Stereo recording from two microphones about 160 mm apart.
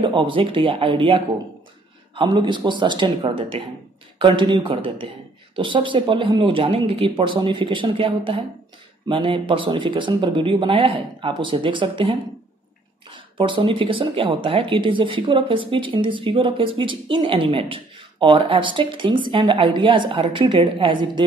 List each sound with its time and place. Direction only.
0.0 s a woman's voice: 30° right (ahead or behind)